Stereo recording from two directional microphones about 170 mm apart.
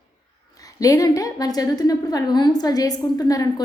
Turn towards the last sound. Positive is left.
turn(degrees=20)  # may be behind; listen again after turning